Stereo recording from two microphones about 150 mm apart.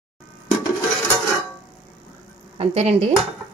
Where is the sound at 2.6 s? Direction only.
45° right (ahead or behind).